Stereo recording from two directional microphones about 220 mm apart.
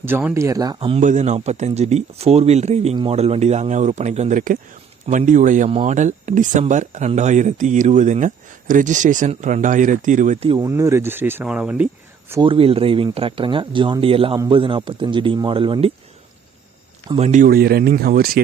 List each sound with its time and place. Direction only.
0.0 s speech: 10° right (ahead or behind); by 10.5 s 35° right (ahead or behind)
10.5 s speech: 15° right (ahead or behind)
12.3 s speech: 20° right (ahead or behind)
17.1 s speech: 30° right (ahead or behind)